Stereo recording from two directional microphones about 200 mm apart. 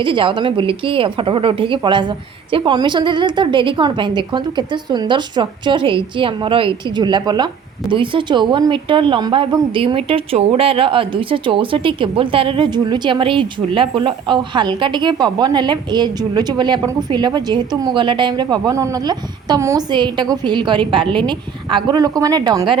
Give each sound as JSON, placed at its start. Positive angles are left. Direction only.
{"t": 0.0, "sound": "speech", "side_deg": -25}